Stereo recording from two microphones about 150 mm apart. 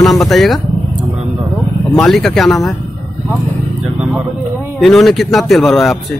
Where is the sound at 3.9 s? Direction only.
10° right (ahead or behind).